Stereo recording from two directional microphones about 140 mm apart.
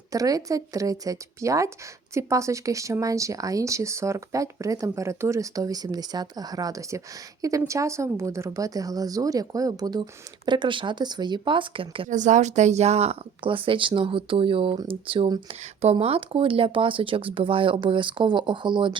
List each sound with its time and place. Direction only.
0.1 s speech: 25° right (ahead or behind)
12.0 s speech: 60° right (ahead or behind); by 18.9 s 35° right (ahead or behind)